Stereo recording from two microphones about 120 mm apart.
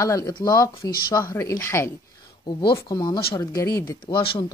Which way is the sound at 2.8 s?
35° left (ahead or behind).